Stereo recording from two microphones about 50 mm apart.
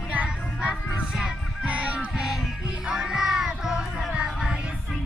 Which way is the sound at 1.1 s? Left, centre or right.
Centre.